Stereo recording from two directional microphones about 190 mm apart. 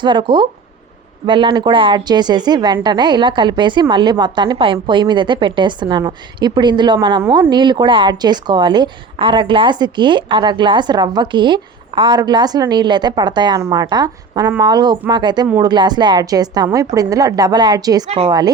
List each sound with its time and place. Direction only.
0.0 s a woman's voice: 25° right (ahead or behind)